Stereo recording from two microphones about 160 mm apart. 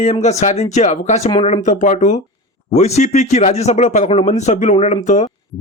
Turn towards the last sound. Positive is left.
turn(degrees=50)  # may be behind; listen again after turning